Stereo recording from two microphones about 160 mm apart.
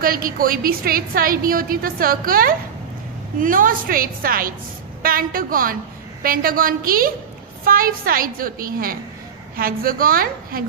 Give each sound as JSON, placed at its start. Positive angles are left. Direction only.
{"t": 0.0, "sound": "a woman's voice", "side_deg": -65}